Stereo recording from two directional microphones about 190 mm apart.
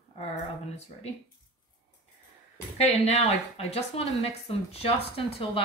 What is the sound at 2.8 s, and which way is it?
A woman's voice, 35° left (ahead or behind).